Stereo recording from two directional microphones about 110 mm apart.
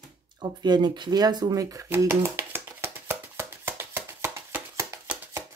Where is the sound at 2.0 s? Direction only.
20° right (ahead or behind).